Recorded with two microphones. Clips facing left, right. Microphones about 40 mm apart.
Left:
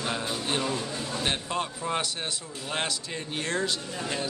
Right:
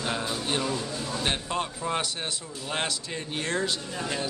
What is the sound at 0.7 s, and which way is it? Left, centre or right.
Speech, left.